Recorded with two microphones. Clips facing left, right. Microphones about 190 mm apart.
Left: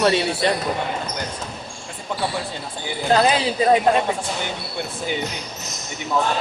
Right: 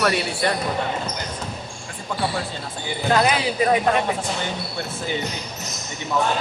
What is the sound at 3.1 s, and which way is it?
Speech, 30° left (ahead or behind).